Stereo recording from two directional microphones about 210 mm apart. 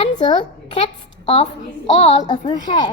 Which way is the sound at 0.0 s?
25° left (ahead or behind).